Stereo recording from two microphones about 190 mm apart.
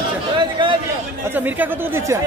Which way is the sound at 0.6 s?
25° right (ahead or behind).